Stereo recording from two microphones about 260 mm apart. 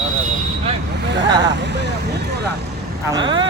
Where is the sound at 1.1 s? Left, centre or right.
Right.